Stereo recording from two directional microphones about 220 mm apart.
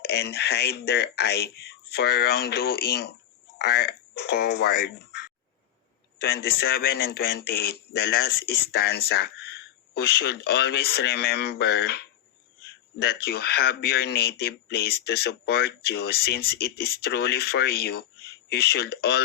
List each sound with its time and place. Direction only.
0.0 s speech: 45° left (ahead or behind)